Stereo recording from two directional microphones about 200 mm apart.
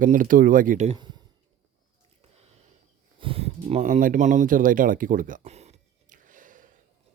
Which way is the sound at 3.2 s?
25° right (ahead or behind).